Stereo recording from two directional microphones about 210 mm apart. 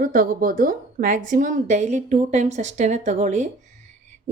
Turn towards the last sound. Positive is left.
turn(degrees=-35)  # may be behind; listen again after turning